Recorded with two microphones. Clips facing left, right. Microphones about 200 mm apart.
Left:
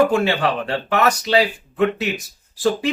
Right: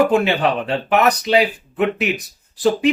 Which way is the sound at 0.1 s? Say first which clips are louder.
Right 2 dB; 20° right (ahead or behind).